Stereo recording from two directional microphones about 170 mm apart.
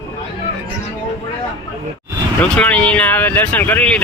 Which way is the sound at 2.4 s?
10° left (ahead or behind).